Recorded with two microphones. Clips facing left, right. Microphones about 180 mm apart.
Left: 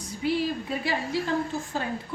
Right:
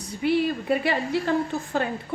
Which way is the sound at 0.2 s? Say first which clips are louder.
Right 4 dB; 60° right (ahead or behind).